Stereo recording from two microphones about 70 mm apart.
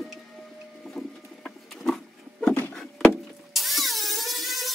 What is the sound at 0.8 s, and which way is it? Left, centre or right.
Patter, centre.